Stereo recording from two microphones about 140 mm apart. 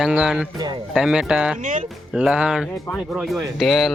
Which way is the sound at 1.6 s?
65° right (ahead or behind).